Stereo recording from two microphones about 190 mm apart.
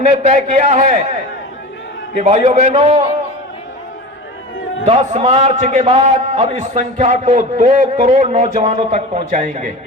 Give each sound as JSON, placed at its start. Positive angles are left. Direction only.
{"t": 0.0, "sound": "a man's voice", "side_deg": -35}
{"t": 4.9, "sound": "a man's voice", "side_deg": -35}